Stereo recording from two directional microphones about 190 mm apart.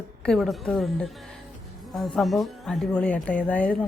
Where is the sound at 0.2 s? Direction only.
5° left (ahead or behind).